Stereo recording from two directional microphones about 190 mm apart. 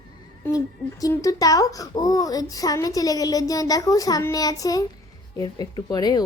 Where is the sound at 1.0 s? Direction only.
20° left (ahead or behind).